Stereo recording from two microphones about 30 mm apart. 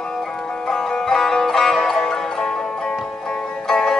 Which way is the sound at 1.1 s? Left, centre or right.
Centre.